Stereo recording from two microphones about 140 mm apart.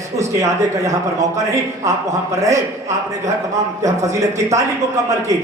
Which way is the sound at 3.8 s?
20° right (ahead or behind).